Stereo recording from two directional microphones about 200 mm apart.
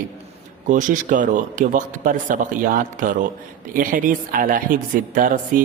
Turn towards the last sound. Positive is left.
turn(degrees=-40)  # may be behind; listen again after turning